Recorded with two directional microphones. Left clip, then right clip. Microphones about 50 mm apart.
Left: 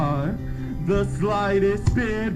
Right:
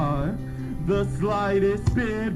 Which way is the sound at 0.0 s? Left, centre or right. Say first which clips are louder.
Left 1 dB; centre.